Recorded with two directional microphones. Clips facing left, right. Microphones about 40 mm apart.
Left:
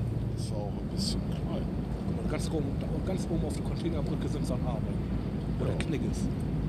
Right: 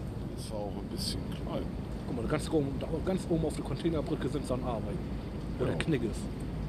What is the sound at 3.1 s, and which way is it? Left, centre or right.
Speech, right.